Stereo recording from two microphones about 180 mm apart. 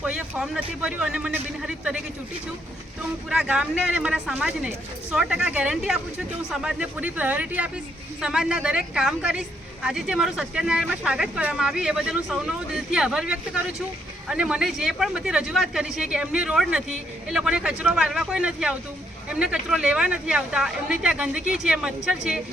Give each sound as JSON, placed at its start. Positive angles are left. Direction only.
{"t": 0.0, "sound": "speech", "side_deg": -5}
{"t": 3.2, "sound": "speech", "side_deg": -5}